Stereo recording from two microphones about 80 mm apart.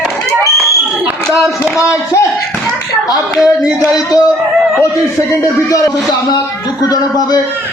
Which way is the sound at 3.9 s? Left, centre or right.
Left.